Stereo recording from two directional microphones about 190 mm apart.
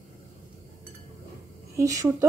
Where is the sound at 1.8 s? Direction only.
15° right (ahead or behind).